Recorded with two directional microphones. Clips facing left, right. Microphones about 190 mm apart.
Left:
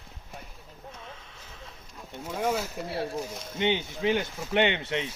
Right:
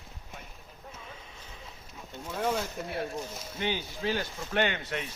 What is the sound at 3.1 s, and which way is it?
Speech, 5° right (ahead or behind).